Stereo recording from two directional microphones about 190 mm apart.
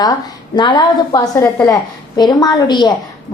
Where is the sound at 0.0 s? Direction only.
20° left (ahead or behind).